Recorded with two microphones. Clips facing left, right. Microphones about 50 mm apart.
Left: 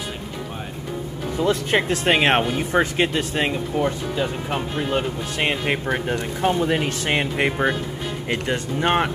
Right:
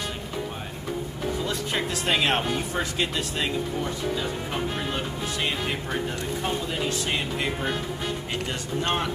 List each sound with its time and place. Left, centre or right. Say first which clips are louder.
1.4 s speech: left 11 dB; left